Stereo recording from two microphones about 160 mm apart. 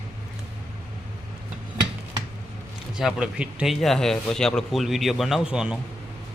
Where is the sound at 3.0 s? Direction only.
5° right (ahead or behind).